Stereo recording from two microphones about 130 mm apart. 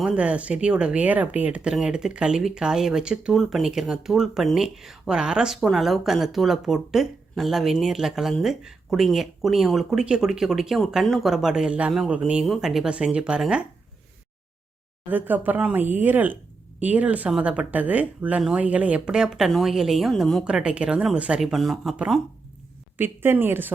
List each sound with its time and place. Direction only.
0.0 s speech: 10° right (ahead or behind)
15.1 s speech: 15° right (ahead or behind)
23.0 s speech: 15° right (ahead or behind)